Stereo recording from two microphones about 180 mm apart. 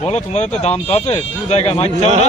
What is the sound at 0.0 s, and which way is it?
Speech, 40° left (ahead or behind).